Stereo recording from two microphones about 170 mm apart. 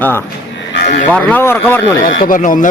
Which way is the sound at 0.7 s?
80° left.